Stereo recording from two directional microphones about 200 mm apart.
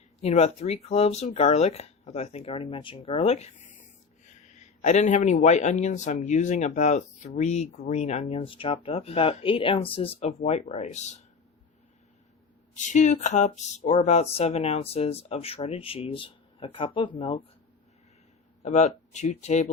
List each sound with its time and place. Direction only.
0.2 s a man's voice: 30° left (ahead or behind)
12.7 s a man's voice: 35° left (ahead or behind)
18.6 s a man's voice: 35° left (ahead or behind)